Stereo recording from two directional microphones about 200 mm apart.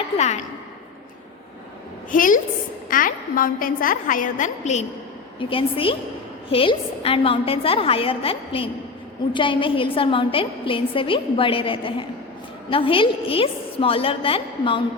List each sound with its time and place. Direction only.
0.2 s a woman's voice: 35° left (ahead or behind)
2.0 s a woman's voice: 40° left (ahead or behind); by 14.8 s 25° left (ahead or behind)